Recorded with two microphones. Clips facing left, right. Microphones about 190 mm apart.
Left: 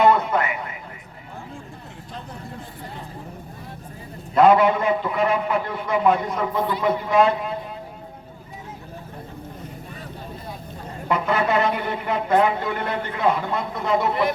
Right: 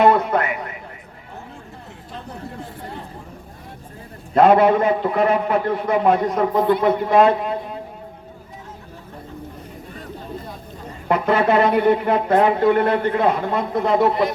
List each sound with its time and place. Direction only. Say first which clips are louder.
0.0 s a sound: right 2 dB; 55° right (ahead or behind)
4.4 s a man's voice: right 2 dB; 50° right (ahead or behind)
11.4 s a man's voice: right 7 dB; 55° right (ahead or behind)